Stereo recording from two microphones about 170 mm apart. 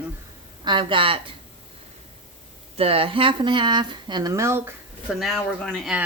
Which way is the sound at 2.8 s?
35° right (ahead or behind).